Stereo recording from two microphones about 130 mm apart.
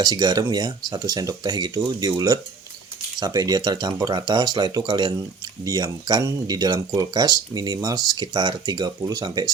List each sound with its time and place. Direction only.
0.0 s speech: 30° right (ahead or behind)